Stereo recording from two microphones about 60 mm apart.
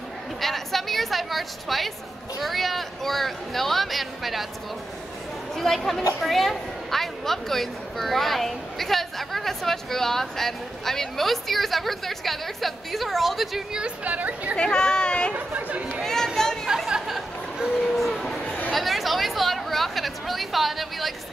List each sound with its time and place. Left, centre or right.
0.4 s a woman's voice: centre
5.6 s a woman's voice: centre
13.7 s a woman's voice: right
14.6 s speech: centre
15.3 s a woman's voice: right
16.0 s chatter: centre
16.6 s chatter: centre
17.9 s a sound: centre